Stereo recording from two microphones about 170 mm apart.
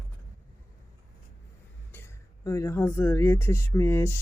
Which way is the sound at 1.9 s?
15° left (ahead or behind).